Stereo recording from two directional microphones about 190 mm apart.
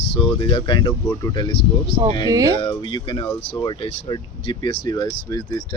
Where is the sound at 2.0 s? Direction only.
25° right (ahead or behind).